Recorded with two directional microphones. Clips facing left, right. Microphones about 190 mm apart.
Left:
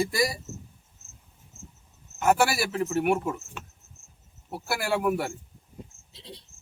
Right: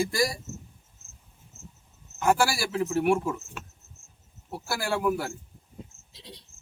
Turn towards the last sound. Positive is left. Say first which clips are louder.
# left 2 dB
turn(degrees=30)  # may be behind; listen again after turning